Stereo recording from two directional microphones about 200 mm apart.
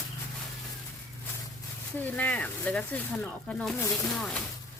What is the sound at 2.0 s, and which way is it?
Speech, 10° left (ahead or behind).